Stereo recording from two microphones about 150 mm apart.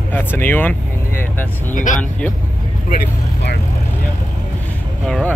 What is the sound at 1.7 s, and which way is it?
Speech, 60° left (ahead or behind).